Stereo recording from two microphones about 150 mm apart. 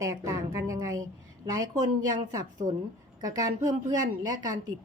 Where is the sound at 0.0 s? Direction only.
20° right (ahead or behind).